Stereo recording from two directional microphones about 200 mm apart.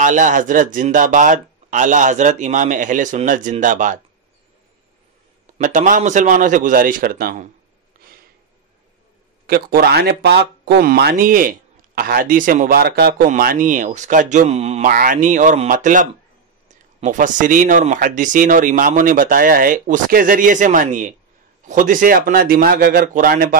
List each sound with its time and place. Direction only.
0.0 s speech: 40° right (ahead or behind)
5.6 s speech: 40° right (ahead or behind)
9.5 s speech: 50° right (ahead or behind)